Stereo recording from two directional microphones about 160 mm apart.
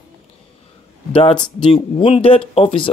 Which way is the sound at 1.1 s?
30° left (ahead or behind).